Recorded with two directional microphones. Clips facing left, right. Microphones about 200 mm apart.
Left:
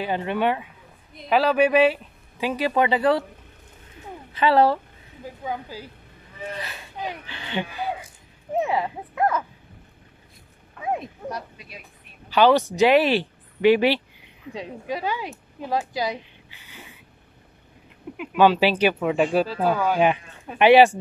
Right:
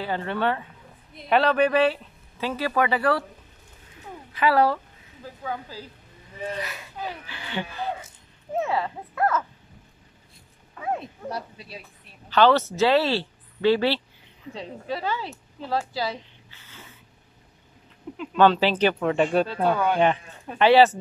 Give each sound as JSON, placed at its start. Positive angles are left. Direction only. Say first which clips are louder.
{"t": 0.0, "sound": "speech", "louder": "left 2 dB", "side_deg": 15}
{"t": 1.1, "sound": "speech", "louder": "left 1 dB", "side_deg": 5}
{"t": 4.3, "sound": "speech", "louder": "left 2 dB", "side_deg": 25}
{"t": 5.2, "sound": "speech", "louder": "left 2 dB", "side_deg": 15}
{"t": 7.0, "sound": "speech", "louder": "left 2 dB", "side_deg": 20}
{"t": 11.2, "sound": "speech", "louder": "even", "side_deg": -30}
{"t": 12.3, "sound": "speech", "louder": "left 1 dB", "side_deg": 10}
{"t": 18.1, "sound": "speech", "louder": "left 1 dB", "side_deg": 10}